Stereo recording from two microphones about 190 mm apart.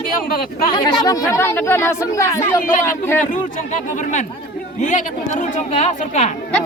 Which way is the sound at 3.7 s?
40° left (ahead or behind).